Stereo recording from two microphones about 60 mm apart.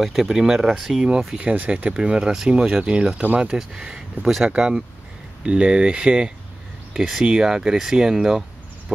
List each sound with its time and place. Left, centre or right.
0.0 s speech: centre
1.3 s speech: right
6.9 s speech: centre